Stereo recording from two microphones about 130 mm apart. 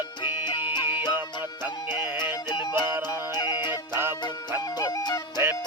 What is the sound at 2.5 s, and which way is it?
Music, 35° left (ahead or behind).